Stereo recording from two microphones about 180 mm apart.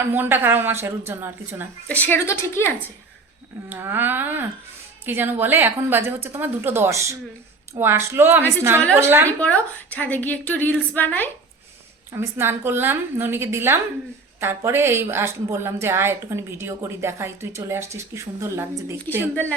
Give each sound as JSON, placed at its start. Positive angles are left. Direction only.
{"t": 0.1, "sound": "speech", "side_deg": -10}
{"t": 1.9, "sound": "a woman's voice", "side_deg": 10}
{"t": 3.7, "sound": "speech", "side_deg": -10}
{"t": 9.4, "sound": "a woman's voice", "side_deg": 10}
{"t": 12.1, "sound": "speech", "side_deg": -15}